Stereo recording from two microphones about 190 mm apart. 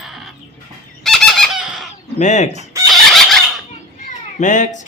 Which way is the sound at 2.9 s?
Centre (ahead or behind).